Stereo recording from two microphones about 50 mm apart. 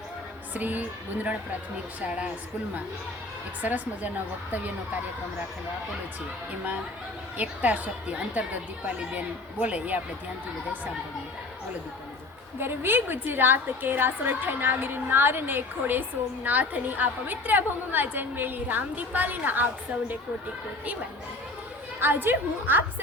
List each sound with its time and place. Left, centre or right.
0.5 s a woman's voice: right
3.6 s a woman's voice: right
7.6 s a woman's voice: right
12.5 s a woman's voice: right
22.0 s a woman's voice: right